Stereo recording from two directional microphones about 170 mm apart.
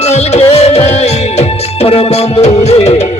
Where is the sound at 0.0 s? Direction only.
40° left (ahead or behind).